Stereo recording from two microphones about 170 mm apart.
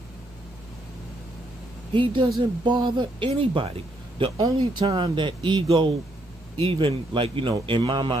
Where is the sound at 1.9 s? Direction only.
30° right (ahead or behind).